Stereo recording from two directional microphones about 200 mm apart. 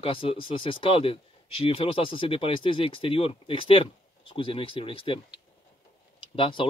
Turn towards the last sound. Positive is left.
turn(degrees=25)  # may be behind; listen again after turning